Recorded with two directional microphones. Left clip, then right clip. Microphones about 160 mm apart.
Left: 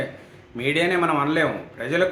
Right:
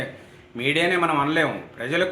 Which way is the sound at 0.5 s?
15° right (ahead or behind).